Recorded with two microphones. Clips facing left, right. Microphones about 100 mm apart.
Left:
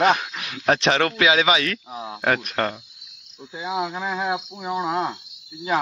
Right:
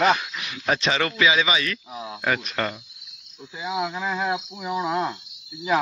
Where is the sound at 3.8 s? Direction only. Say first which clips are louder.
Right 1 dB; 10° left (ahead or behind).